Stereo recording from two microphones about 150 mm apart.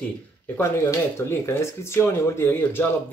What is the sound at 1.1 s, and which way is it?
Speech, 15° left (ahead or behind).